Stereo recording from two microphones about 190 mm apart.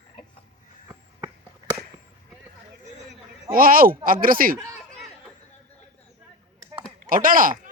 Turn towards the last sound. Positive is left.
turn(degrees=-45)  # may be behind; listen again after turning